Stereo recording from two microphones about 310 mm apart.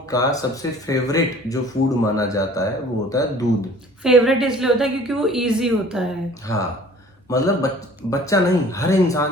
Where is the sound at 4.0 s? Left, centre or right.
Centre.